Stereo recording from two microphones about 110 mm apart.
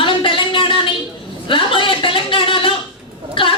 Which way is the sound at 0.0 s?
50° left (ahead or behind).